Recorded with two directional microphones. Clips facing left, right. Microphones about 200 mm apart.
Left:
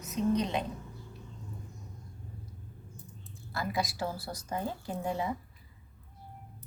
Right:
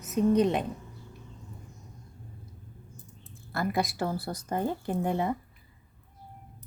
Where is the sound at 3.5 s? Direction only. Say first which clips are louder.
Right 4 dB; 55° right (ahead or behind).